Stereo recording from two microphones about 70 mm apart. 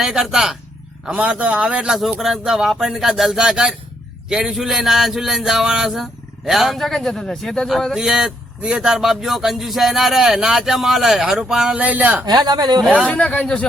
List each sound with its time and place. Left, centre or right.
0.0 s speech: centre
2.1 s speech: centre
7.9 s speech: centre
11.8 s speech: right
12.2 s speech: right
13.1 s a man's voice: left